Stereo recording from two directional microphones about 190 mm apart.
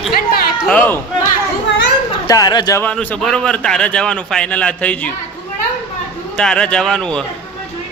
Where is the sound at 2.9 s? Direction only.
5° left (ahead or behind).